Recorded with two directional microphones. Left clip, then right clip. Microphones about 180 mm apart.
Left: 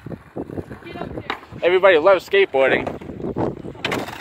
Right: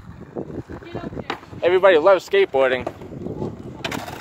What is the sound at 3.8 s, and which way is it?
Mechanisms, 45° right (ahead or behind).